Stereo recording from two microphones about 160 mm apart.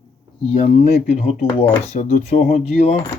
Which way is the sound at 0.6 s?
40° left (ahead or behind).